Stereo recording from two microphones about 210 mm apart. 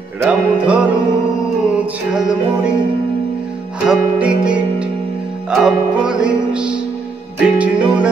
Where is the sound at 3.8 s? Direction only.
5° right (ahead or behind).